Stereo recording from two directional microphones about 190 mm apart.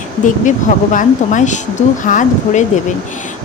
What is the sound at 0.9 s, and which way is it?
A woman's voice, 40° left (ahead or behind).